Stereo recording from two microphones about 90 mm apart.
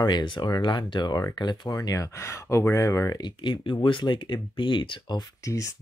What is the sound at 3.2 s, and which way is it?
Speech, 60° left (ahead or behind).